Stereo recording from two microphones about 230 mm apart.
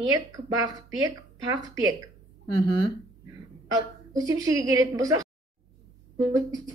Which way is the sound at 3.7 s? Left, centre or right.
Centre.